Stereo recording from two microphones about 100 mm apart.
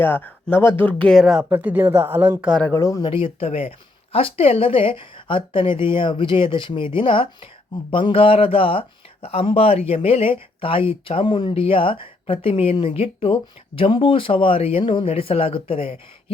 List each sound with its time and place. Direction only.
0.0 s speech: 20° left (ahead or behind)
1.2 s speech: 5° right (ahead or behind)
1.5 s speech: 15° right (ahead or behind)
2.7 s speech: 30° left (ahead or behind)
3.0 s speech: 65° left (ahead or behind)